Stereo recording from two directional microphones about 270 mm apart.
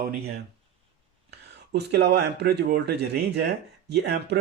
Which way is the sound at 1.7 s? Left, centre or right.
Right.